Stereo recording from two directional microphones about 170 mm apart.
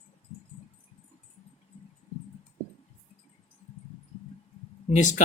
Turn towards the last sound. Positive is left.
turn(degrees=45)  # may be behind; listen again after turning